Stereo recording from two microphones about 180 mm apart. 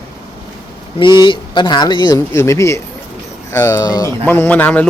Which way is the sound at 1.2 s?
25° left (ahead or behind).